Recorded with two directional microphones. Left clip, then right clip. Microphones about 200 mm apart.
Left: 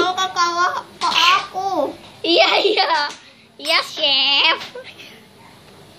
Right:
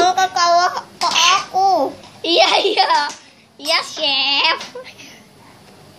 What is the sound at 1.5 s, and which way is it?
Babbling, 25° right (ahead or behind).